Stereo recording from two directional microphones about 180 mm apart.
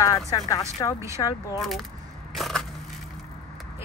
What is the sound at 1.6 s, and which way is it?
Speech, centre (ahead or behind).